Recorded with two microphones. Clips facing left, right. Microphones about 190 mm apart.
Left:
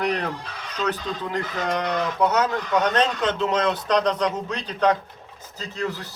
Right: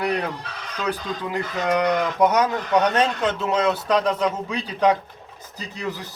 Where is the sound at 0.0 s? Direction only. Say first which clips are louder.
Right 1 dB; 10° right (ahead or behind).